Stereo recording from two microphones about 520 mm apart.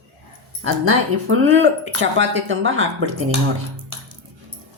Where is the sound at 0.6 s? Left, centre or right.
Right.